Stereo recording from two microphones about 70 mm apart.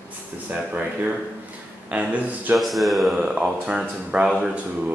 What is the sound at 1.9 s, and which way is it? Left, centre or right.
Speech, right.